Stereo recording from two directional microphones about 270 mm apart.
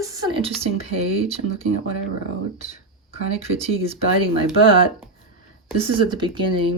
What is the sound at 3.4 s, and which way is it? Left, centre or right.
Speech, right.